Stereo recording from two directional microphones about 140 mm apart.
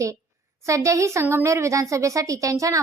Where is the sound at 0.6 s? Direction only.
20° right (ahead or behind).